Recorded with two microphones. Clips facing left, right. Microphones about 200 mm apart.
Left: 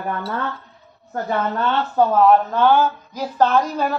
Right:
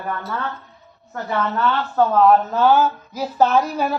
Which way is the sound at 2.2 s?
5° right (ahead or behind).